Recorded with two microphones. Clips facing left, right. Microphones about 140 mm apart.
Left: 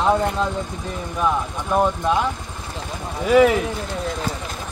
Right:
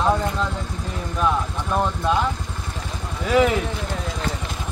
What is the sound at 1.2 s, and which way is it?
Speech, 10° left (ahead or behind).